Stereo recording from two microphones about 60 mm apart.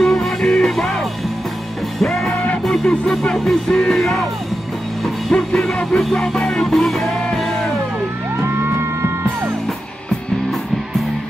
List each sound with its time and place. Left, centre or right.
0.0 s music: centre
5.3 s music: centre
8.4 s music: right